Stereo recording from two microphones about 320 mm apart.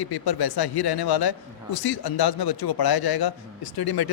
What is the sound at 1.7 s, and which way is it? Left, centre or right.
A man's voice, left.